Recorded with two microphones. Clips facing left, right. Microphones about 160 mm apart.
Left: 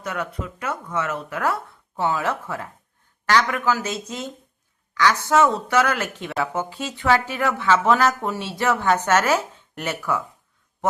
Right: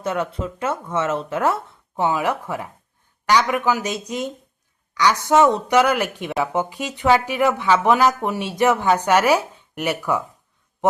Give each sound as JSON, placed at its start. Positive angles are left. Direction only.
{"t": 0.0, "sound": "speech", "side_deg": -25}